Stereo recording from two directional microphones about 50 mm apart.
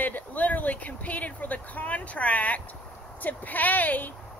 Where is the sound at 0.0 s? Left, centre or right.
Left.